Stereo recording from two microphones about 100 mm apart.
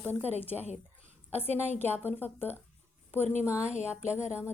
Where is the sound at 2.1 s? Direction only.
20° left (ahead or behind).